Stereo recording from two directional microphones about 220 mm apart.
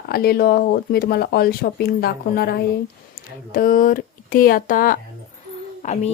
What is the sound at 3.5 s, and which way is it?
Speech, 40° left (ahead or behind).